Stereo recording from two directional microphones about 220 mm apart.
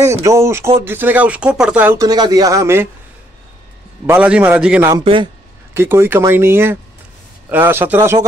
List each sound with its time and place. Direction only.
0.2 s speech: 15° right (ahead or behind)
4.0 s speech: 5° right (ahead or behind)
4.8 s a man's voice: 20° right (ahead or behind)
5.8 s speech: 10° right (ahead or behind)